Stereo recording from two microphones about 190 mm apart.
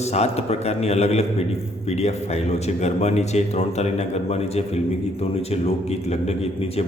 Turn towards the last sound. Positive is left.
turn(degrees=35)  # may be behind; listen again after turning